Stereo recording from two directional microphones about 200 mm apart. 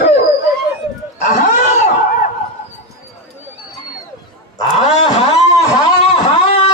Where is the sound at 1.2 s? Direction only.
35° left (ahead or behind).